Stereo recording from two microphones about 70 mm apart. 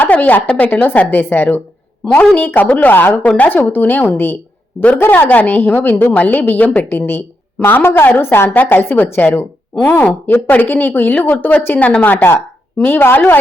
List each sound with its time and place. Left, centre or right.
0.0 s a sound: left
0.4 s a woman's voice: left
9.2 s a woman's voice: left
12.1 s a woman's voice: left